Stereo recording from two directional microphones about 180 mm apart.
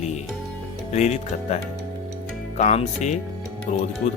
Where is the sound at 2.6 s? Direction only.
40° left (ahead or behind).